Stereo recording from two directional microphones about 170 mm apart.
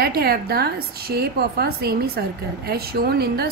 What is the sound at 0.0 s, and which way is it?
A woman's voice, 65° right (ahead or behind).